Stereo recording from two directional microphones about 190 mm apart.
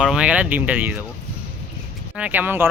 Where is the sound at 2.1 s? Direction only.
5° right (ahead or behind).